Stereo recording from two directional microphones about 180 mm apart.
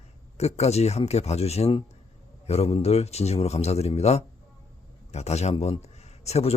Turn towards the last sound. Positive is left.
turn(degrees=35)  # may be behind; listen again after turning